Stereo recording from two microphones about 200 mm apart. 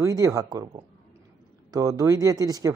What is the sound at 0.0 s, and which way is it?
Speech, 15° right (ahead or behind).